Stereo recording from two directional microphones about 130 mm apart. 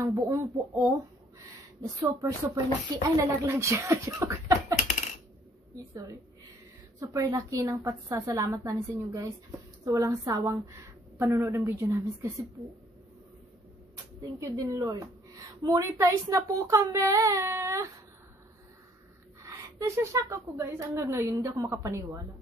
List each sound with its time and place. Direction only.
0.0 s a woman's voice: 25° right (ahead or behind)
2.0 s a woman's voice: 25° right (ahead or behind)
7.0 s a woman's voice: 25° right (ahead or behind)
14.4 s a woman's voice: 25° right (ahead or behind)
19.4 s a woman's voice: 25° right (ahead or behind)